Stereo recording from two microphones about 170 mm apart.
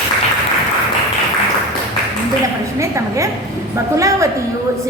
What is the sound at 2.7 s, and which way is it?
A woman's voice, 15° right (ahead or behind).